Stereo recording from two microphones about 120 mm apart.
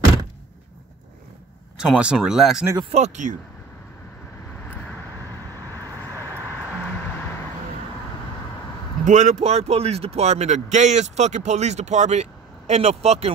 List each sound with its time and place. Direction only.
1.8 s speech: 5° right (ahead or behind)
2.9 s speech: 80° right
5.7 s vehicle: 15° left (ahead or behind)
9.0 s speech: 85° right; by 13.3 s 65° right (ahead or behind)